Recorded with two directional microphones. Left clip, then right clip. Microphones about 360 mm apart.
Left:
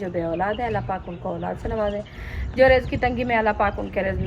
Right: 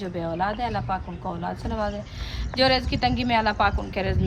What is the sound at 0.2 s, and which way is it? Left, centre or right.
A woman's voice, centre.